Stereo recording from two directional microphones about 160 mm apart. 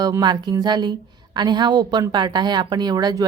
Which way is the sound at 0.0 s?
25° right (ahead or behind).